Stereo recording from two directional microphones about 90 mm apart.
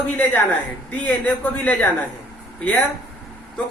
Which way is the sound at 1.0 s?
15° left (ahead or behind).